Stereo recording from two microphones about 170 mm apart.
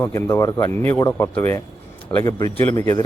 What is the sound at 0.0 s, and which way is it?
A man's voice, 15° left (ahead or behind).